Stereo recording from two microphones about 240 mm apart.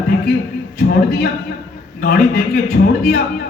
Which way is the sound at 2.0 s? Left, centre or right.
Left.